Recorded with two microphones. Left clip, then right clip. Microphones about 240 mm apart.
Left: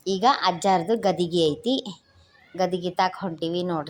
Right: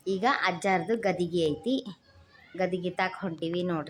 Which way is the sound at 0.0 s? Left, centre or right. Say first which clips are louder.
Left 6 dB; centre.